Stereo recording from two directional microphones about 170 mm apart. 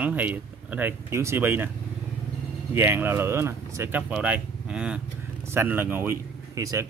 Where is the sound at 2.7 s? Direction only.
15° right (ahead or behind).